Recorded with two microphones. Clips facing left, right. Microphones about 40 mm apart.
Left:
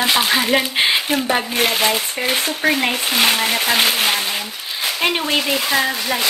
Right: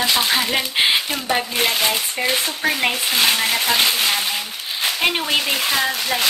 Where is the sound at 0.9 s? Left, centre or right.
Centre.